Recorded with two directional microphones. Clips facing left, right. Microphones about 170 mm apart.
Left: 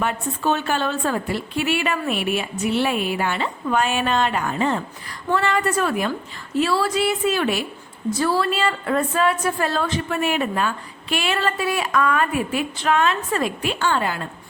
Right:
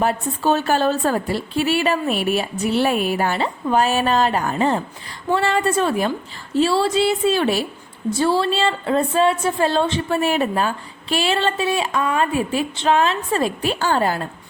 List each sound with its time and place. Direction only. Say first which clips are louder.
0.0 s a woman's voice: right 3 dB; 35° right (ahead or behind)